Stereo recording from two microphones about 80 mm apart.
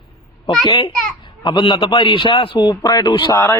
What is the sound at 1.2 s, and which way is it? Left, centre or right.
A man's voice, left.